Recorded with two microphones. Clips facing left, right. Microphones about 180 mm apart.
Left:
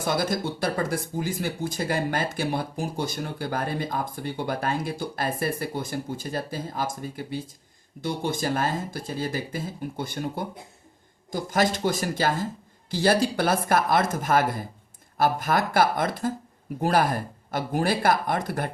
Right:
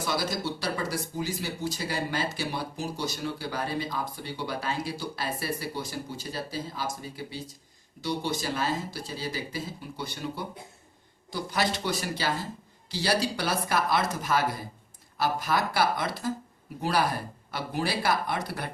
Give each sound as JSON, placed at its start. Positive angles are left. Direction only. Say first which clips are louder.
{"t": 0.0, "sound": "speech", "louder": "left 4 dB", "side_deg": 50}